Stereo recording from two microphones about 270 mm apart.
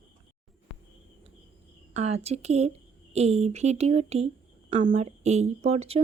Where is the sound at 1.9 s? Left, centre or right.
Right.